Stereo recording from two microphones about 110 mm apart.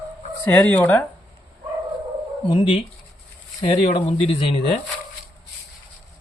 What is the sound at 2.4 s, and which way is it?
Speech, 50° left (ahead or behind).